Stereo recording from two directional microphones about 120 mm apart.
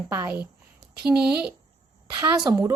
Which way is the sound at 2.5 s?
25° right (ahead or behind).